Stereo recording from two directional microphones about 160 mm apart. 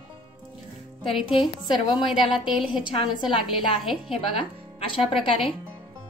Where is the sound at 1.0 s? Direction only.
Centre (ahead or behind).